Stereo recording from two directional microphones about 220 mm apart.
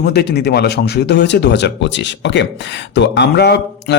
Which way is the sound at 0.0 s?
45° left (ahead or behind).